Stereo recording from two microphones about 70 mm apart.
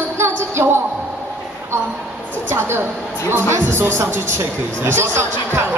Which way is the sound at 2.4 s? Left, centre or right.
Right.